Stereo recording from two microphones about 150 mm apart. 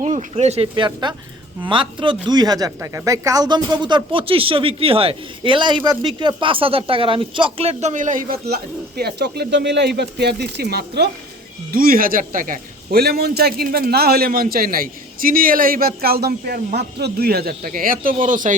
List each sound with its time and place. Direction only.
0.0 s speech: 50° right (ahead or behind); by 11.1 s 90° right
11.7 s a man's voice: 75° right (ahead or behind)